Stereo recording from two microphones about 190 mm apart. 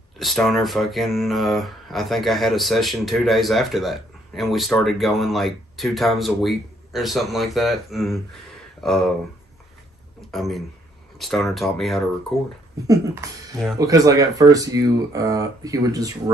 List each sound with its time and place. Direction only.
0.2 s speech: centre (ahead or behind)
10.3 s speech: centre (ahead or behind)
12.8 s speech: 20° right (ahead or behind)